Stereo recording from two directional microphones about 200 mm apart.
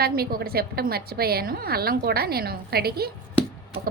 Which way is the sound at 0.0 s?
50° right (ahead or behind).